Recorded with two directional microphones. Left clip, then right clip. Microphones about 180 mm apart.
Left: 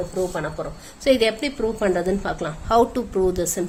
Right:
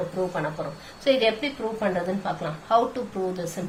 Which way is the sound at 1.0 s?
55° left (ahead or behind).